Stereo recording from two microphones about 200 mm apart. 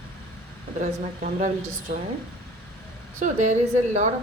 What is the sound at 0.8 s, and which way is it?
Speech, 35° right (ahead or behind).